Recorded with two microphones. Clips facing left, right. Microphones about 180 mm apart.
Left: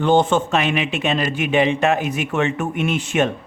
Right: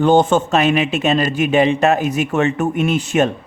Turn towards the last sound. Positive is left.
turn(degrees=-40)  # may be behind; listen again after turning